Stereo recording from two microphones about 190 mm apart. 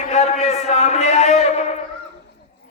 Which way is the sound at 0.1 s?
35° left (ahead or behind).